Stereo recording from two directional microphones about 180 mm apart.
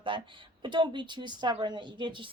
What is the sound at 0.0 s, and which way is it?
A woman's voice, 30° right (ahead or behind).